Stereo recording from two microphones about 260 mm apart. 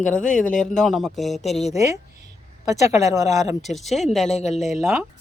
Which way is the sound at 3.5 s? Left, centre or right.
Centre.